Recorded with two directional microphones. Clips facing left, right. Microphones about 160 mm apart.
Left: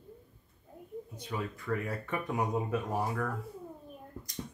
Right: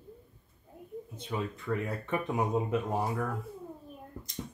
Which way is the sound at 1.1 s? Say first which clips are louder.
Right 3 dB; 25° right (ahead or behind).